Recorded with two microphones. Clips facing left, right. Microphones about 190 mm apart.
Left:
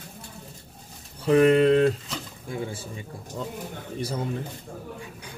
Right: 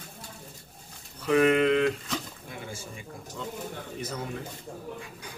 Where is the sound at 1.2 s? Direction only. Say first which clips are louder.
Left 4 dB; 35° left (ahead or behind).